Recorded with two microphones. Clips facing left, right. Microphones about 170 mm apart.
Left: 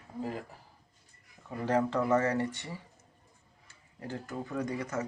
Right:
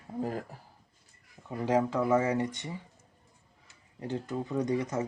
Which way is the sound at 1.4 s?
10° right (ahead or behind).